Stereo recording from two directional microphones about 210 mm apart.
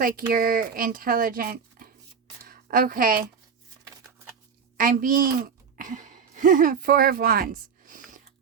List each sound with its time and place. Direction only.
0.0 s speech: 40° right (ahead or behind)
4.8 s speech: 40° right (ahead or behind)